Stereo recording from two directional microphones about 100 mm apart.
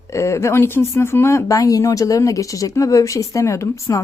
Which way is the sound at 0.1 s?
30° left (ahead or behind).